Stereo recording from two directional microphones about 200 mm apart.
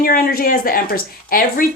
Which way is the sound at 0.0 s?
45° left (ahead or behind).